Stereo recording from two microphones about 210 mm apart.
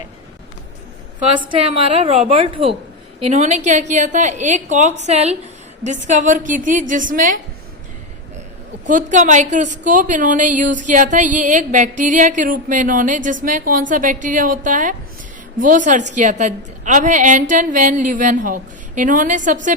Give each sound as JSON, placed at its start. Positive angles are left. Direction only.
{"t": 2.0, "sound": "a woman's voice", "side_deg": -30}
{"t": 8.9, "sound": "a woman's voice", "side_deg": -35}